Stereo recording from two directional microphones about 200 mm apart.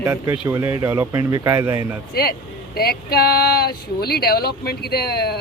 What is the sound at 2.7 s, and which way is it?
Speech, 50° left (ahead or behind).